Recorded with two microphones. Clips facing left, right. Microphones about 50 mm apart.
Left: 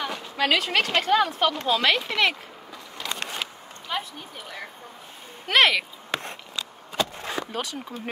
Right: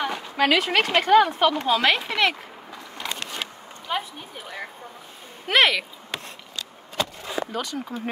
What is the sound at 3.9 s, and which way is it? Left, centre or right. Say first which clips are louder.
Speech: right 2 dB; centre.